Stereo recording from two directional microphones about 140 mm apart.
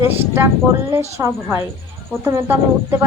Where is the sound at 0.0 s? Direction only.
15° right (ahead or behind).